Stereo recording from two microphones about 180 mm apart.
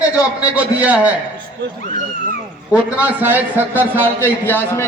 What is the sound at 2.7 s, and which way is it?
A man's voice, 10° right (ahead or behind).